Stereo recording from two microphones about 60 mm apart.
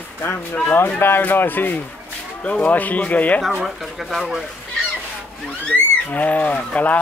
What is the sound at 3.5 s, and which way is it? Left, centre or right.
Speech, centre.